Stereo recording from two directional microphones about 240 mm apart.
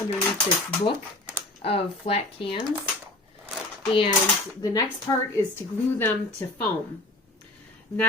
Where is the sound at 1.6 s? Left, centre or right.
Left.